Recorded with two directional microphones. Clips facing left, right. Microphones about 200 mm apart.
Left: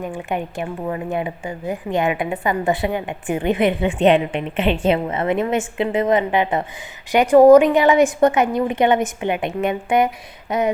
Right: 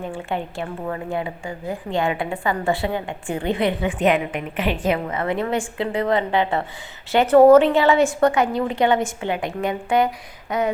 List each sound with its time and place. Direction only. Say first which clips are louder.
0.0 s a woman's voice: left 2 dB; 15° left (ahead or behind)